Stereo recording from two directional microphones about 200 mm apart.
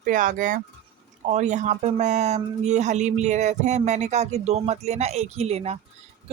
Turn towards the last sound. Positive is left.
turn(degrees=-30)  # may be behind; listen again after turning